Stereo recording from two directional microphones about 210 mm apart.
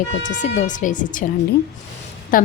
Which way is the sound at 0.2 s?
60° left (ahead or behind).